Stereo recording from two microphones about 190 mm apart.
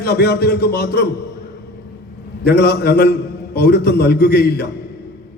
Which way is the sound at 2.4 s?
60° left (ahead or behind).